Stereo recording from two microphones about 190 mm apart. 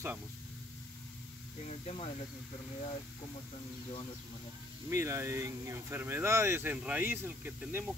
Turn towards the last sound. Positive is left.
turn(degrees=-10)  # may be behind; listen again after turning